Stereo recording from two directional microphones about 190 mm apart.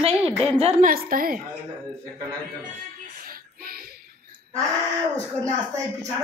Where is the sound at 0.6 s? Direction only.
35° right (ahead or behind).